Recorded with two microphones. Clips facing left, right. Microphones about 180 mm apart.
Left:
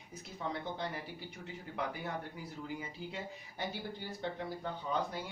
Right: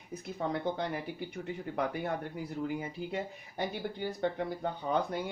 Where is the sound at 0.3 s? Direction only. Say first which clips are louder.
Right 6 dB; 55° right (ahead or behind).